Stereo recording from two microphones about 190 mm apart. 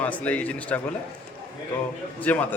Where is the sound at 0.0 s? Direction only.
10° left (ahead or behind).